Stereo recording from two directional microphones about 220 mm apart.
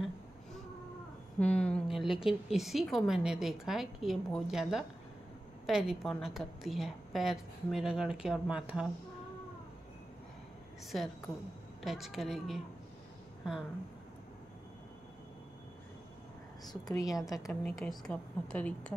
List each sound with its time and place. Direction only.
1.4 s a woman's voice: 5° left (ahead or behind)
10.9 s a woman's voice: centre (ahead or behind)
16.6 s a woman's voice: 15° left (ahead or behind)
17.5 s a woman's voice: 5° left (ahead or behind)